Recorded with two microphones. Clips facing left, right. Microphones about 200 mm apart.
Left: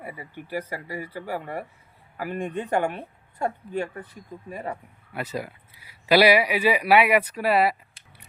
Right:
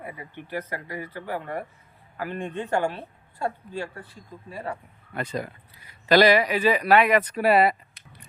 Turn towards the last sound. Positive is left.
turn(degrees=5)  # may be behind; listen again after turning